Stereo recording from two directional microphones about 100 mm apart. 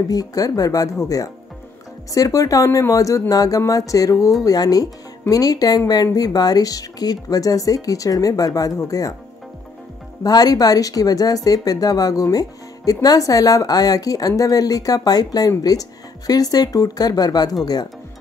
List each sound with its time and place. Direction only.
0.1 s speech: 40° left (ahead or behind)
10.2 s speech: 40° left (ahead or behind)